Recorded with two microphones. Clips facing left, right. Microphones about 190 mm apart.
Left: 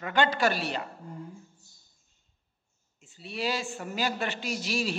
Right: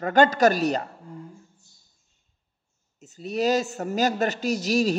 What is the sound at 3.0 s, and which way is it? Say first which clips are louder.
A man's voice: right 9 dB; 40° right (ahead or behind).